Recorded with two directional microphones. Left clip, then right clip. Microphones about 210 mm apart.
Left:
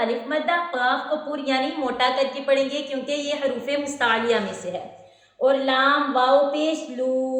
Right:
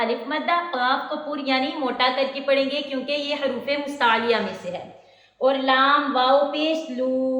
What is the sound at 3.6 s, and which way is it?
A woman's voice, 20° left (ahead or behind).